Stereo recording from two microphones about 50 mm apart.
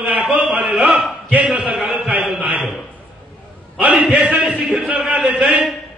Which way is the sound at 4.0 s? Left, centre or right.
Right.